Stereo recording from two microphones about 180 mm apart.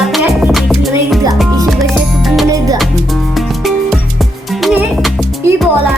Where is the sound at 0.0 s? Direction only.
Centre (ahead or behind).